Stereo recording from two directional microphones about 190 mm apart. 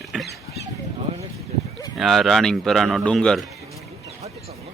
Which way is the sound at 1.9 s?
Centre (ahead or behind).